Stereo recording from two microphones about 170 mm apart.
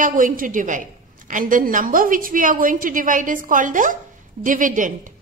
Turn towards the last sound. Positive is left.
turn(degrees=-50)  # may be behind; listen again after turning